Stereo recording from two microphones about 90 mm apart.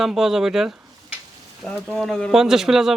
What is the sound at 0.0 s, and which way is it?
A man's voice, 5° right (ahead or behind).